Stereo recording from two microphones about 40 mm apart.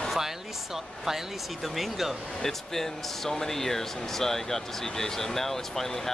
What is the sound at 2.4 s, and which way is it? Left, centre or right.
Speech, centre.